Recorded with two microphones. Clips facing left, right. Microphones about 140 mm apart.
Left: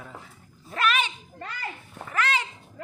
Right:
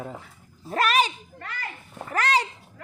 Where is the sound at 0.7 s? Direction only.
40° right (ahead or behind).